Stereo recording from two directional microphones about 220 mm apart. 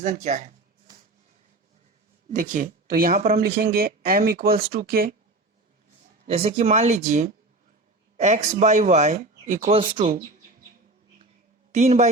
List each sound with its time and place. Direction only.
0.0 s speech: 35° right (ahead or behind)
2.3 s speech: 35° right (ahead or behind)
6.2 s speech: 25° right (ahead or behind)
11.7 s speech: 30° right (ahead or behind)